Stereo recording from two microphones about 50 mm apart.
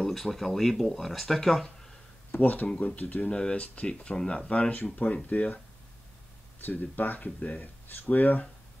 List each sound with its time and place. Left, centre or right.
0.0 s speech: centre
2.3 s speech: left
3.3 s speech: left
6.6 s speech: left